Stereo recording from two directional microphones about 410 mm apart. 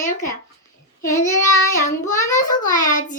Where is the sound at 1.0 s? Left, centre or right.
Centre.